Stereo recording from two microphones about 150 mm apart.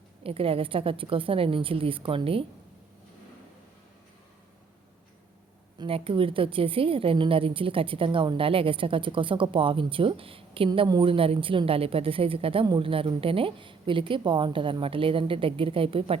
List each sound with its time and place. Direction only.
0.2 s a woman's voice: 40° right (ahead or behind)
5.8 s a woman's voice: 35° right (ahead or behind)